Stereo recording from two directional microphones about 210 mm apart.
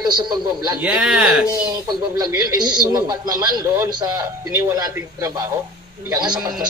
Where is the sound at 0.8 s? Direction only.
5° right (ahead or behind).